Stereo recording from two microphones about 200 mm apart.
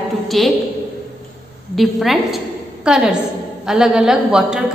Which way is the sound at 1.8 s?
Centre (ahead or behind).